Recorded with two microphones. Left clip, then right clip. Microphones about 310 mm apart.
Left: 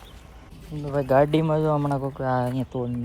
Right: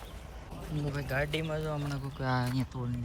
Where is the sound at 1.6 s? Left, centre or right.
Left.